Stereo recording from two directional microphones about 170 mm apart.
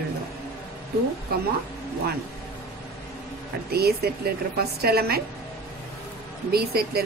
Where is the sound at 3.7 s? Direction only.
65° right (ahead or behind).